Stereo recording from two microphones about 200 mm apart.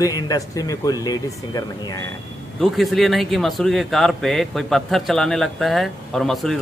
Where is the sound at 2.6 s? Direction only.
Centre (ahead or behind).